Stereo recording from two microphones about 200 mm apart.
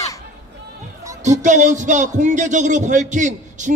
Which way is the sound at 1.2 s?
40° right (ahead or behind).